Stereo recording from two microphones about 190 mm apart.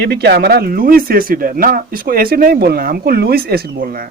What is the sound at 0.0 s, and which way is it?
Speech, 60° right (ahead or behind).